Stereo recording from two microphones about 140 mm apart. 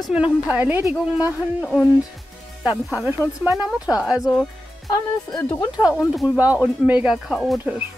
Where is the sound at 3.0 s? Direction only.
20° right (ahead or behind).